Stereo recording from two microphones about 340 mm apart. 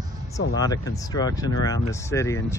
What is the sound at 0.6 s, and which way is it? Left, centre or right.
Speech, centre.